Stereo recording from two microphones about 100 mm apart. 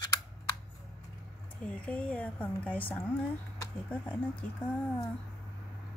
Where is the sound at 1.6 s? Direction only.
10° left (ahead or behind).